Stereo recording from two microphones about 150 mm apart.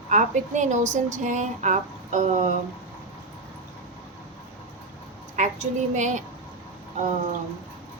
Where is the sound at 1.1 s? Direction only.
55° right (ahead or behind).